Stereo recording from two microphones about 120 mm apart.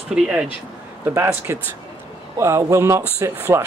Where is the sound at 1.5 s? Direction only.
20° right (ahead or behind).